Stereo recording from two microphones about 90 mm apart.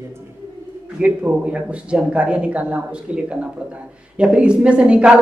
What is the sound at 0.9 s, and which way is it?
Speech, 15° right (ahead or behind).